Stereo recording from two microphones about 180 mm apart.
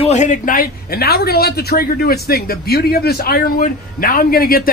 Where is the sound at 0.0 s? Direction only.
40° left (ahead or behind).